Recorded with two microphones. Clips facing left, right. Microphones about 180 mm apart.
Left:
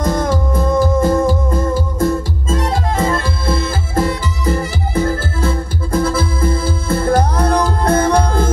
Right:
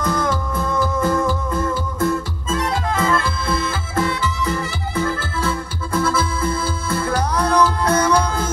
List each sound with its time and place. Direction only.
0.0 s music: 40° left (ahead or behind)